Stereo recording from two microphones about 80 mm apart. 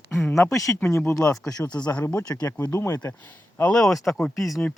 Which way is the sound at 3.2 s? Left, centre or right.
Centre.